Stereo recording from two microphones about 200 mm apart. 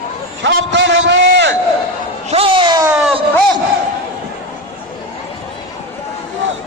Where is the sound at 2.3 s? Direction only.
25° right (ahead or behind).